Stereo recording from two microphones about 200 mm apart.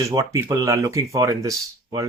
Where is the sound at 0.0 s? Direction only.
15° right (ahead or behind).